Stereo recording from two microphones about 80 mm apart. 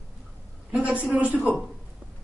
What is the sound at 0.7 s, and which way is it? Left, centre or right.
Speech, centre.